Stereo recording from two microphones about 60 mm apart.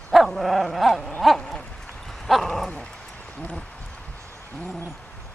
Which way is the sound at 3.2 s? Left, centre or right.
Centre.